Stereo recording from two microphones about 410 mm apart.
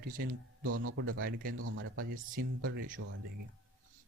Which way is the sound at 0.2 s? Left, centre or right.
Right.